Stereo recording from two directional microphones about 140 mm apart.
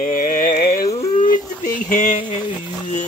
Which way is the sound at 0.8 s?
45° left (ahead or behind).